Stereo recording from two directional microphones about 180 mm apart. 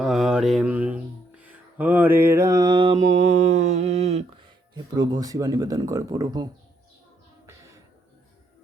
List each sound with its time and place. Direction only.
0.0 s music: centre (ahead or behind); by 2.9 s 25° right (ahead or behind)
3.2 s mantra: 40° right (ahead or behind)
4.7 s speech: 20° right (ahead or behind)